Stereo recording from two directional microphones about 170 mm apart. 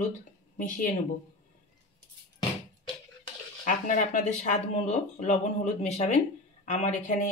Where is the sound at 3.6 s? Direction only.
50° left (ahead or behind).